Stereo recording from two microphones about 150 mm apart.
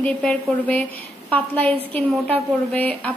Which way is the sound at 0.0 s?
10° left (ahead or behind).